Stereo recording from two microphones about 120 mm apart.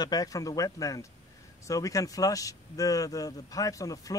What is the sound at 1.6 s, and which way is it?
Speech, 30° left (ahead or behind).